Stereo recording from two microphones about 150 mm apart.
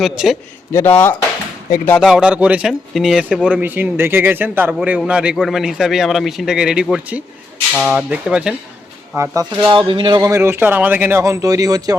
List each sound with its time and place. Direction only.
0.0 s a man's voice: centre (ahead or behind)
0.7 s speech: 15° left (ahead or behind)
2.0 s a man's voice: 5° right (ahead or behind)
9.1 s speech: 20° right (ahead or behind)